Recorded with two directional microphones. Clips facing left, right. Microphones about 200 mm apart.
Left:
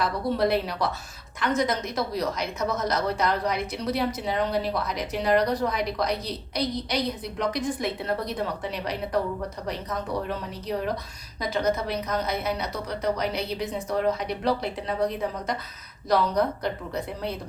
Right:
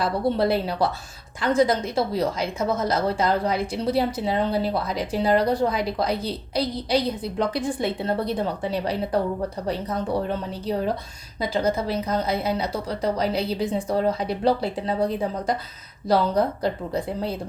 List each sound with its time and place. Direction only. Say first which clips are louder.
0.0 s a woman's voice: right 3 dB; 30° right (ahead or behind)